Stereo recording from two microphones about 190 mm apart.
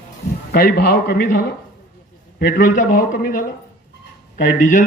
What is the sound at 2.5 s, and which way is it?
Speech, 45° left (ahead or behind).